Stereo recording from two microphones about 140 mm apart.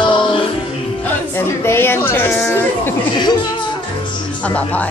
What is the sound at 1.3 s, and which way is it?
Speech, 15° left (ahead or behind).